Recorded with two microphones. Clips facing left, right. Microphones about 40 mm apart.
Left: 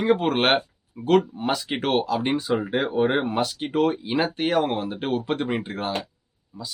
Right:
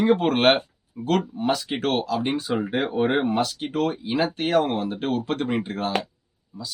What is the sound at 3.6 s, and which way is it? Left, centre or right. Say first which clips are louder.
Speech: left 2 dB; centre.